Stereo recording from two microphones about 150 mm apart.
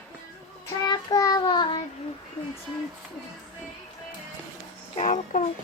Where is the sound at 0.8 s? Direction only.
25° left (ahead or behind).